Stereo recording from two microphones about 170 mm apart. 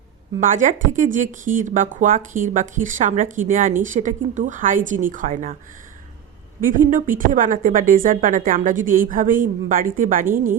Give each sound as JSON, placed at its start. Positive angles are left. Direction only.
{"t": 0.3, "sound": "speech", "side_deg": -50}
{"t": 6.6, "sound": "speech", "side_deg": -55}